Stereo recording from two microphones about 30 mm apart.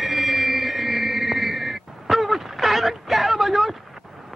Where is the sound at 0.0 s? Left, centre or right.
Centre.